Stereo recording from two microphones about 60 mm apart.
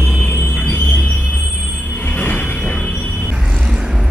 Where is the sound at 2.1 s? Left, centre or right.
Left.